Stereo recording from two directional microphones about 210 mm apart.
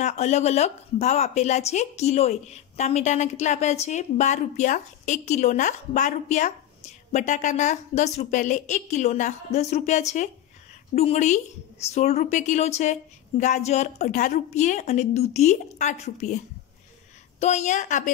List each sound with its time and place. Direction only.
0.0 s speech: 30° left (ahead or behind)
17.4 s speech: 35° left (ahead or behind)